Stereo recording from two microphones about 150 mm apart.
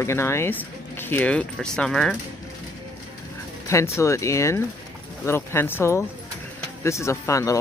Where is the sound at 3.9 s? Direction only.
20° left (ahead or behind).